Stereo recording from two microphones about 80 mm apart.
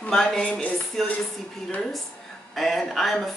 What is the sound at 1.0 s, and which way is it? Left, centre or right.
Speech, centre.